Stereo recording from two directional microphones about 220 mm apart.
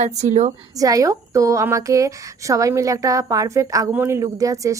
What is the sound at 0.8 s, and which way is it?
A woman's voice, 15° right (ahead or behind).